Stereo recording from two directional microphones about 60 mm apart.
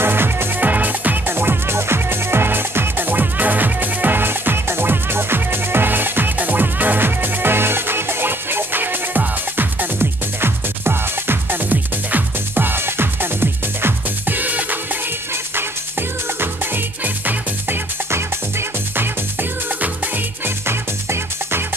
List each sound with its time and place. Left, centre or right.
0.0 s music: right
16.3 s music: right
20.4 s music: right